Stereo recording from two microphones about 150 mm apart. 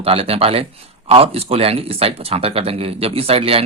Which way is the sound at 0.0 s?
40° right (ahead or behind).